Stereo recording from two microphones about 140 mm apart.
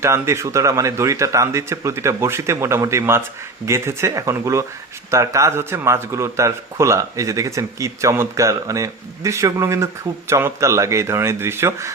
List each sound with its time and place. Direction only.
0.0 s speech: 20° right (ahead or behind)